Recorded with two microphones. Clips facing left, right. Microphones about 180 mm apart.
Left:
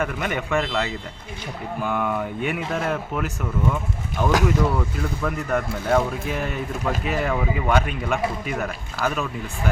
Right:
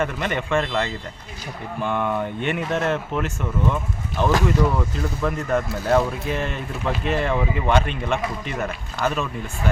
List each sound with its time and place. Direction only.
0.0 s speech: 5° left (ahead or behind)